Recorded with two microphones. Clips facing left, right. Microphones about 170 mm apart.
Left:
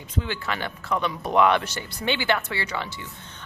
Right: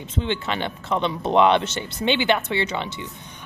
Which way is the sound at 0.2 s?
25° right (ahead or behind).